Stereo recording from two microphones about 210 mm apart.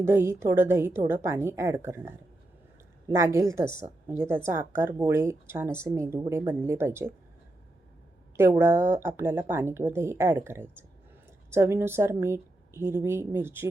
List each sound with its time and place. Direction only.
0.0 s speech: 10° right (ahead or behind)
8.4 s speech: 10° right (ahead or behind)